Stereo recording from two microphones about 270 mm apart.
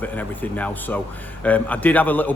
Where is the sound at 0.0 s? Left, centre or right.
Centre.